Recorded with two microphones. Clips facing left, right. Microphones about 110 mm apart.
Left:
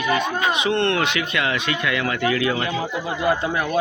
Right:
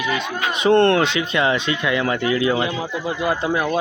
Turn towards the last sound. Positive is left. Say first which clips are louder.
# right 1 dB
turn(degrees=-15)  # may be behind; listen again after turning